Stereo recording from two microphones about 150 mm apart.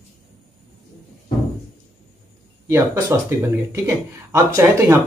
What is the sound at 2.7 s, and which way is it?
A man's voice, 20° right (ahead or behind).